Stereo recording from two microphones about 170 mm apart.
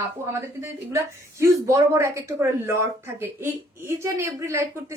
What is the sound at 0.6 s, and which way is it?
Speech, 15° right (ahead or behind).